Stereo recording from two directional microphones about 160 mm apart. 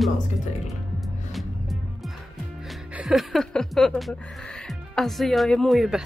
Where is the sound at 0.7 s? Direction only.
Centre (ahead or behind).